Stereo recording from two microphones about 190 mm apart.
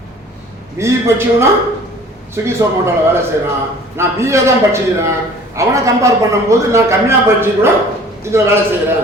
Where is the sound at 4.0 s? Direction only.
15° right (ahead or behind).